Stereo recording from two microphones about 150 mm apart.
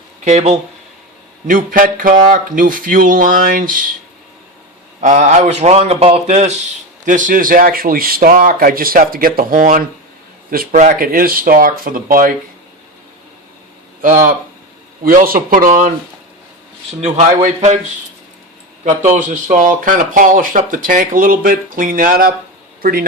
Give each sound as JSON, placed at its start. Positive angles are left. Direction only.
{"t": 0.3, "sound": "a man's voice", "side_deg": -45}
{"t": 1.5, "sound": "speech", "side_deg": -65}
{"t": 4.9, "sound": "a man's voice", "side_deg": -55}
{"t": 14.0, "sound": "speech", "side_deg": -65}
{"t": 17.0, "sound": "a man's voice", "side_deg": -50}
{"t": 18.9, "sound": "speech", "side_deg": -55}